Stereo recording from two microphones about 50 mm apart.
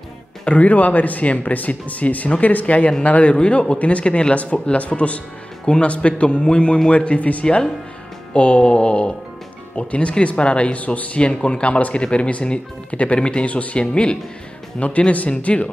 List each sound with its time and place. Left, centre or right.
0.5 s speech: left
7.4 s speech: centre